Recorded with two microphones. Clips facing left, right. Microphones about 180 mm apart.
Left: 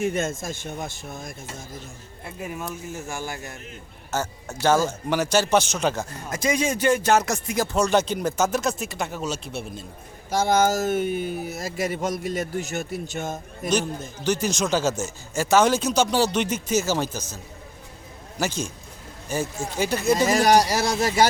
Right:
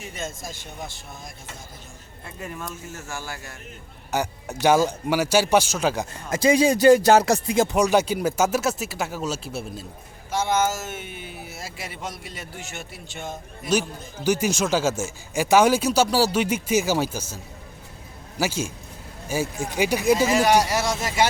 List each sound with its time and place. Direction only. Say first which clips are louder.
0.0 s speech: left 9 dB; 50° left (ahead or behind)
2.4 s speech: left 2 dB; 10° left (ahead or behind)
4.1 s speech: right 2 dB; 15° right (ahead or behind)
6.3 s speech: right 6 dB; 30° right (ahead or behind)
7.8 s speech: left 3 dB; 10° right (ahead or behind)
10.3 s speech: left 3 dB; 35° left (ahead or behind)
14.3 s speech: right 1 dB; 10° right (ahead or behind)
20.3 s speech: left 1 dB; 40° left (ahead or behind)